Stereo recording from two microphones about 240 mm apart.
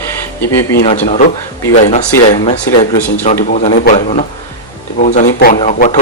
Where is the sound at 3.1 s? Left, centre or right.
Left.